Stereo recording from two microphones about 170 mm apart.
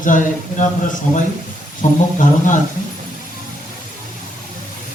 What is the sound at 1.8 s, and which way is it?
Speech, 50° left (ahead or behind).